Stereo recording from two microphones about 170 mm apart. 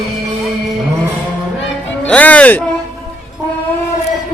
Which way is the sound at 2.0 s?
10° left (ahead or behind).